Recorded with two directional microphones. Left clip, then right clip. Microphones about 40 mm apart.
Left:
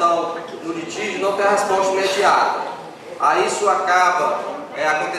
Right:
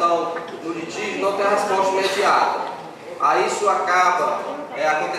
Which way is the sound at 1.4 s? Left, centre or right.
Centre.